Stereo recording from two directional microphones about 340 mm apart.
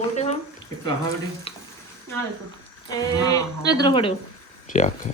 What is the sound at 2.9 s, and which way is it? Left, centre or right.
A man's voice, centre.